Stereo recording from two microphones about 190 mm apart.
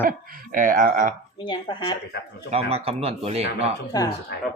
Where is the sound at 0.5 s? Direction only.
45° right (ahead or behind).